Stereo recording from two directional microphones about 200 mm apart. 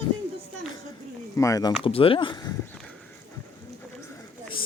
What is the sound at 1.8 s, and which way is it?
Speech, 30° left (ahead or behind).